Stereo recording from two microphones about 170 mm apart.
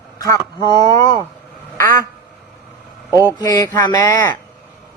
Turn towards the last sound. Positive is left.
turn(degrees=20)  # may be behind; listen again after turning